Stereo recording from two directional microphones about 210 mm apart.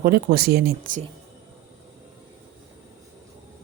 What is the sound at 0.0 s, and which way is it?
Speech, 45° right (ahead or behind).